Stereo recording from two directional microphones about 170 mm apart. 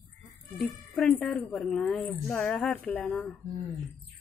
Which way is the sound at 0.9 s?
Centre (ahead or behind).